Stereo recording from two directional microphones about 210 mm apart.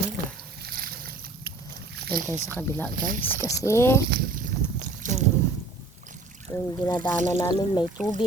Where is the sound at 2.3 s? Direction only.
10° left (ahead or behind).